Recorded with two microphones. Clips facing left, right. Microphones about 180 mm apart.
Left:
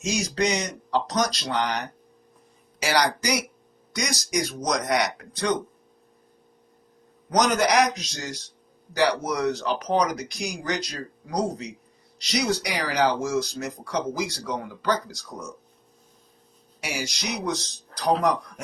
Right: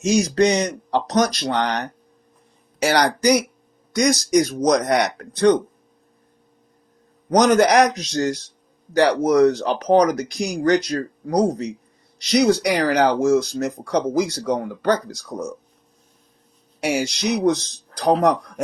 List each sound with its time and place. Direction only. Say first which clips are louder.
0.1 s speech: right 8 dB; 60° right (ahead or behind)
2.8 s speech: right 7 dB; 55° right (ahead or behind)
7.3 s speech: right 7 dB; 55° right (ahead or behind)
16.8 s speech: right 10 dB; 60° right (ahead or behind)